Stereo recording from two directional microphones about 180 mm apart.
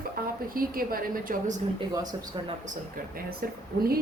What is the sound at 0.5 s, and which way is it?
Speech, 55° right (ahead or behind).